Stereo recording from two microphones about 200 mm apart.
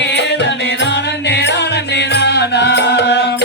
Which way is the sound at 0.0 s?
60° left (ahead or behind).